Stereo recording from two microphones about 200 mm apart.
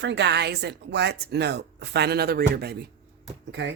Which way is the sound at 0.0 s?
60° right (ahead or behind).